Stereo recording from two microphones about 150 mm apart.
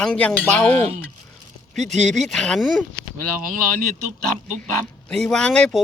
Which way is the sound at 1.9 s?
50° right (ahead or behind).